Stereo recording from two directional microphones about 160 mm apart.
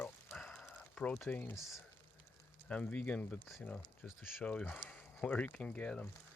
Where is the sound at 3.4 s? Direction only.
Centre (ahead or behind).